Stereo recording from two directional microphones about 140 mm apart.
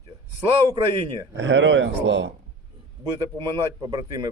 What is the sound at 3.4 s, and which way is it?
Speech, 30° right (ahead or behind).